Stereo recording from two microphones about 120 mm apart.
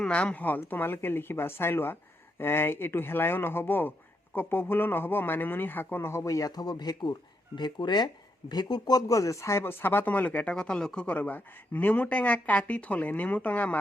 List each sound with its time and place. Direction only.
0.0 s speech: 10° left (ahead or behind)